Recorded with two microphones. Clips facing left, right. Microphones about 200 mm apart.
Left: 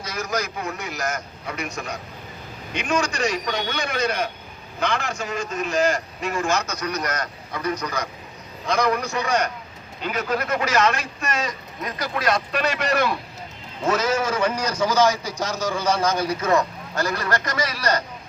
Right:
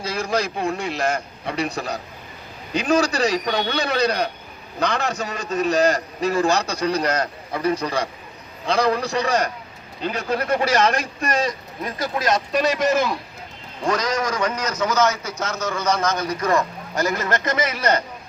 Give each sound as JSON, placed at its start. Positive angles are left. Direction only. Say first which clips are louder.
{"t": 0.0, "sound": "a man's voice", "louder": "right 4 dB", "side_deg": -30}
{"t": 13.8, "sound": "a man's voice", "louder": "left 1 dB", "side_deg": 5}
{"t": 16.9, "sound": "a man's voice", "louder": "right 2 dB", "side_deg": -20}